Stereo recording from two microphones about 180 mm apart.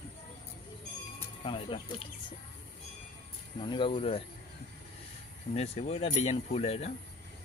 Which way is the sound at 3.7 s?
30° left (ahead or behind).